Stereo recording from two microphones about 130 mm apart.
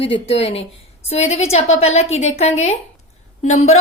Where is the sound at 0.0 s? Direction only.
50° left (ahead or behind).